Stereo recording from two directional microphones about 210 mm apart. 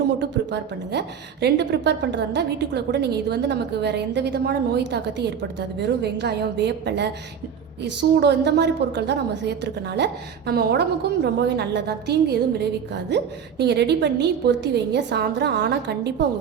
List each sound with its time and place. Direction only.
0.2 s a woman's voice: 55° right (ahead or behind)
8.2 s a woman's voice: 55° right (ahead or behind)